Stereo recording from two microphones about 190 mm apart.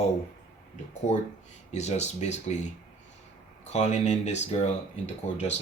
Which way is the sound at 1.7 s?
35° left (ahead or behind).